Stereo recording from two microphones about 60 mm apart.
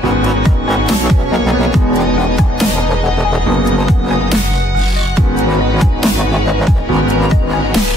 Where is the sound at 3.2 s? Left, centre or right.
Centre.